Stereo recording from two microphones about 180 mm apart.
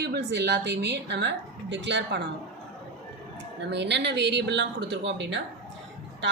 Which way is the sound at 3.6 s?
75° right (ahead or behind).